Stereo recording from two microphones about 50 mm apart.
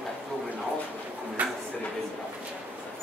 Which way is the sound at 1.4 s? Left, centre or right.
Right.